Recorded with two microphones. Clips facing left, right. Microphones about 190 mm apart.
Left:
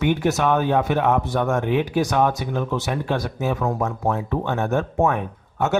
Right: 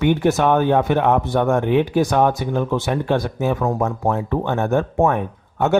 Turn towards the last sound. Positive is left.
turn(degrees=-55)  # may be behind; listen again after turning